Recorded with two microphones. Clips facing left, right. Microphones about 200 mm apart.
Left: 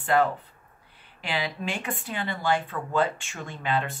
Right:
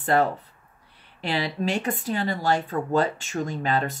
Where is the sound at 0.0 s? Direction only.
40° right (ahead or behind).